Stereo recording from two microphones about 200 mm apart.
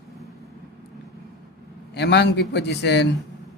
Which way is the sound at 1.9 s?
60° left (ahead or behind).